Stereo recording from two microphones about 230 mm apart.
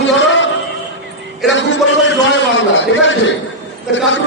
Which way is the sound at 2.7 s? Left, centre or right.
Left.